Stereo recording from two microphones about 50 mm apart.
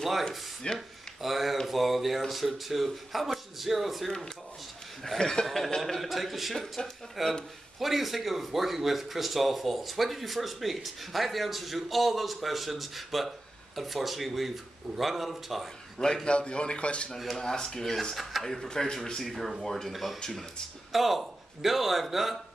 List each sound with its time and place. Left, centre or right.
0.0 s speech: centre
0.7 s a sound: centre
1.7 s speech: centre
5.2 s speech: centre
16.3 s speech: left
19.9 s speech: centre
20.2 s speech: centre
20.9 s speech: centre